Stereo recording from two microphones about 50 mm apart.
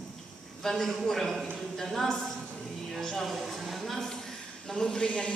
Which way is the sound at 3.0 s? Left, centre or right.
Centre.